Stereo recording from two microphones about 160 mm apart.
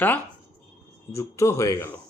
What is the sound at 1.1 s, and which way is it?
Speech, 20° left (ahead or behind).